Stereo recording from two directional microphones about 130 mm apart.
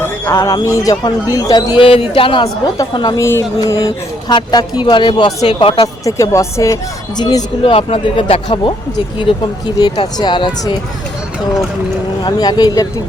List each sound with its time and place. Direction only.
0.0 s speech: 20° left (ahead or behind)
3.2 s speech: 20° left (ahead or behind); by 5.9 s 40° left (ahead or behind)
6.1 s speech: 25° left (ahead or behind)
7.6 s speech: 45° left (ahead or behind)
9.7 s speech: 35° left (ahead or behind)
12.2 s speech: 30° left (ahead or behind)